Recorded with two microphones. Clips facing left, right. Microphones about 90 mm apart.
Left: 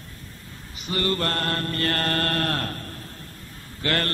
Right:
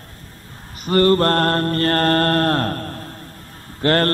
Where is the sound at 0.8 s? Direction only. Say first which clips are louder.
Right 11 dB; 45° right (ahead or behind).